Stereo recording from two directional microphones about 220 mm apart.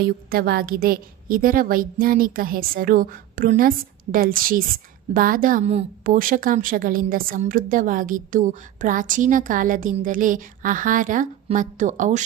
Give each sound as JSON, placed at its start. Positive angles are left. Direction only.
{"t": 0.3, "sound": "a woman's voice", "side_deg": -40}